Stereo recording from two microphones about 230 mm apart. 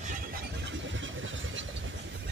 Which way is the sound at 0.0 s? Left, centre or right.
Right.